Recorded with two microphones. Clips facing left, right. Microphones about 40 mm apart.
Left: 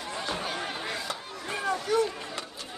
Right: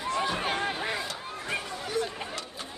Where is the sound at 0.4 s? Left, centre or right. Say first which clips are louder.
Right 4 dB; right.